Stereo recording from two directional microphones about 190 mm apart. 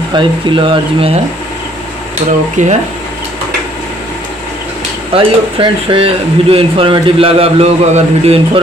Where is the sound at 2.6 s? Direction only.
40° right (ahead or behind).